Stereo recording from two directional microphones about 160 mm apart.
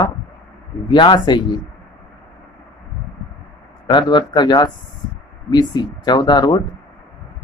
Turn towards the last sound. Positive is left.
turn(degrees=25)  # may be behind; listen again after turning